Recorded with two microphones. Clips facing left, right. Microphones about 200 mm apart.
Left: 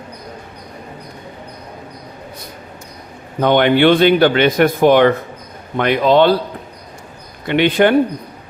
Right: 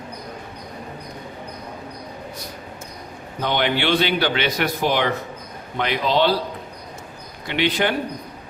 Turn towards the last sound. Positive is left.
turn(degrees=55)  # may be behind; listen again after turning